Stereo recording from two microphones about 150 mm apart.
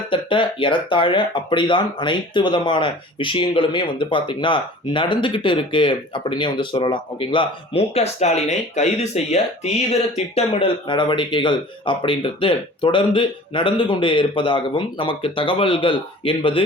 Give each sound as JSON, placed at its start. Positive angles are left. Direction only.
{"t": 0.1, "sound": "speech", "side_deg": 35}